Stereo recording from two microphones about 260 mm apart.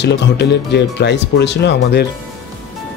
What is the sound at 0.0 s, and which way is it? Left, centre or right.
Speech, left.